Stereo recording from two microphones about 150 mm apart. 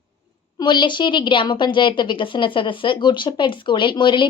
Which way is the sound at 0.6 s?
30° left (ahead or behind).